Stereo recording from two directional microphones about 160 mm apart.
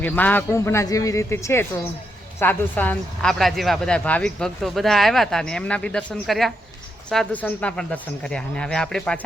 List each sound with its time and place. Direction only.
0.0 s a man's voice: 10° left (ahead or behind)